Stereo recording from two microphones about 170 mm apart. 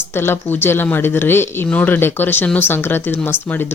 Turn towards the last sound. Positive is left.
turn(degrees=10)  # may be behind; listen again after turning